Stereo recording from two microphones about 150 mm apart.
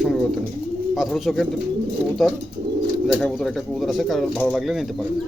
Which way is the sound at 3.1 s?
5° left (ahead or behind).